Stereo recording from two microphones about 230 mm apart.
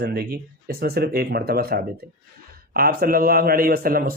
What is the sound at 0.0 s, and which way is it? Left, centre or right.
A man's voice, right.